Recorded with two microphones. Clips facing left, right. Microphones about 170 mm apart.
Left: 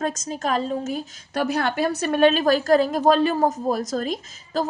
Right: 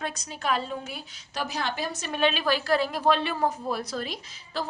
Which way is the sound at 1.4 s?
60° left (ahead or behind).